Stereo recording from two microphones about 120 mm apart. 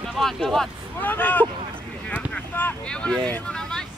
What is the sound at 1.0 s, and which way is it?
Speech, 15° left (ahead or behind).